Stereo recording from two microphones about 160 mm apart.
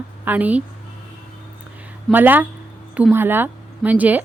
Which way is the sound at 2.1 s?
10° right (ahead or behind).